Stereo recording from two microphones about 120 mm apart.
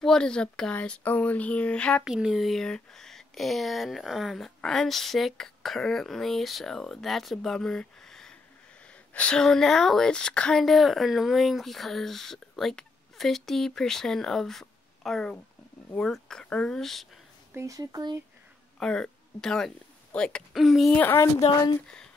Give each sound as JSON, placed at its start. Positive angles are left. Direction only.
{"t": 0.0, "sound": "speech", "side_deg": 5}
{"t": 2.0, "sound": "speech", "side_deg": -5}
{"t": 17.6, "sound": "speech", "side_deg": -30}
{"t": 18.8, "sound": "speech", "side_deg": 5}
{"t": 20.9, "sound": "speech", "side_deg": 20}
{"t": 21.8, "sound": "speech", "side_deg": 5}